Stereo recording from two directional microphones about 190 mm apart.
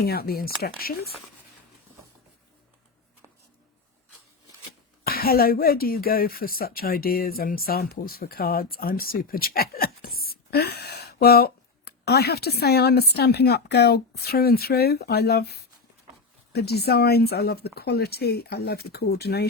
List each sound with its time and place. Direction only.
0.0 s speech: 55° left (ahead or behind)
5.0 s speech: 50° left (ahead or behind)